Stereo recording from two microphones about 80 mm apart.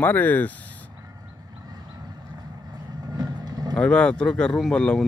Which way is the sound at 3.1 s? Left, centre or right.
Right.